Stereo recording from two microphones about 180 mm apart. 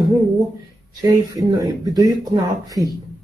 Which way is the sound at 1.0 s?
20° right (ahead or behind).